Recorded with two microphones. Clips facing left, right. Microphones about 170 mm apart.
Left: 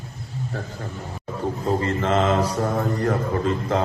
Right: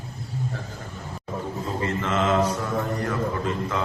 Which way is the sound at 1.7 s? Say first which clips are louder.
Left 5 dB; 35° left (ahead or behind).